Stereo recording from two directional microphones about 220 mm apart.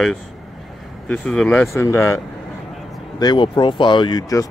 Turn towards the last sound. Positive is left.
turn(degrees=15)  # may be behind; listen again after turning